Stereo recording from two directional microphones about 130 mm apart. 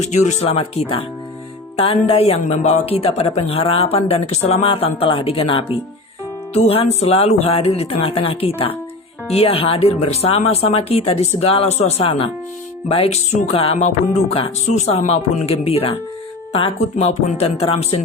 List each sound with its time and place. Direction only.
0.0 s speech: 65° left (ahead or behind)